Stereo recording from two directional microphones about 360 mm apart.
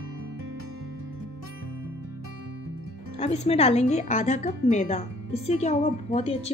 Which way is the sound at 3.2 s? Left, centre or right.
Centre.